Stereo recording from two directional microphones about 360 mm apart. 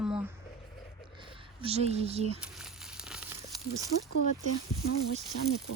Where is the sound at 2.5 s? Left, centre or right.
Centre.